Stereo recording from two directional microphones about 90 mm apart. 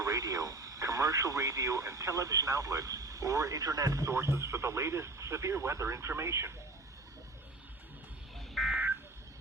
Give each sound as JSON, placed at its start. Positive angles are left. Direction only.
{"t": 0.0, "sound": "speech", "side_deg": -40}
{"t": 8.6, "sound": "buzzer", "side_deg": 0}